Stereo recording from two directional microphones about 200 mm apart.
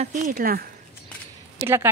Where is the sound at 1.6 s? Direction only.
10° right (ahead or behind).